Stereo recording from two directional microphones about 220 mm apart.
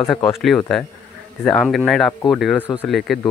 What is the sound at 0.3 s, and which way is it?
Speech, centre (ahead or behind).